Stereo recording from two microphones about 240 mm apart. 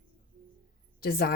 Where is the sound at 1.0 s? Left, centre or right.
Left.